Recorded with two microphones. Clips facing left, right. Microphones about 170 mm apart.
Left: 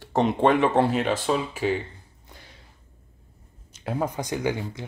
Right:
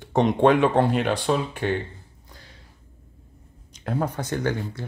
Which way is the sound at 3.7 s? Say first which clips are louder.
Right 1 dB; 10° left (ahead or behind).